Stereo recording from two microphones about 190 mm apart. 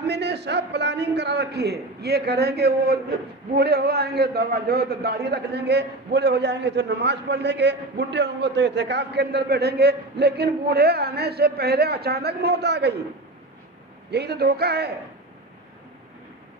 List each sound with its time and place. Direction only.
0.0 s a man's voice: 60° right (ahead or behind)
14.1 s a man's voice: 60° right (ahead or behind)